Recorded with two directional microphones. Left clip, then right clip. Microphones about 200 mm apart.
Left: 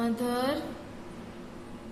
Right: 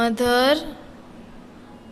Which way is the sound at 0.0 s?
50° right (ahead or behind).